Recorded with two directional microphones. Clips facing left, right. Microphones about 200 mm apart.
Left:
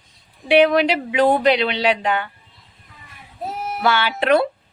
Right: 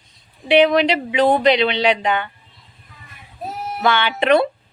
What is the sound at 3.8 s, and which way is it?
Speech, 5° left (ahead or behind).